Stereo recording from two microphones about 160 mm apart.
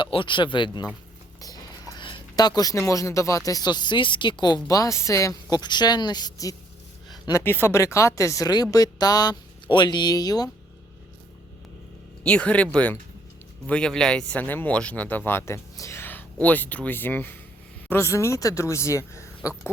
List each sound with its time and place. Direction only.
0.0 s speech: 30° left (ahead or behind)
7.1 s a sound: 25° left (ahead or behind)
7.4 s speech: 15° left (ahead or behind)
12.2 s speech: 5° left (ahead or behind)